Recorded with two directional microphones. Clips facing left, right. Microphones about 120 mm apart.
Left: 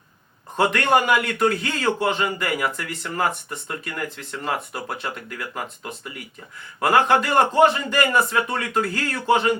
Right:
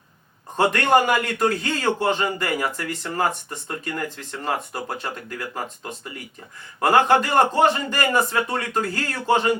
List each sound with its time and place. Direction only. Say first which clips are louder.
0.5 s a man's voice: right 1 dB; 40° right (ahead or behind)